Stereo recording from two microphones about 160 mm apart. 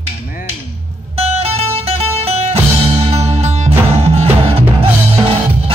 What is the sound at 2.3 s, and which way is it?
Music, 40° right (ahead or behind).